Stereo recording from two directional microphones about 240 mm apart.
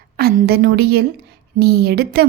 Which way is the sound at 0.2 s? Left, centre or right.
Right.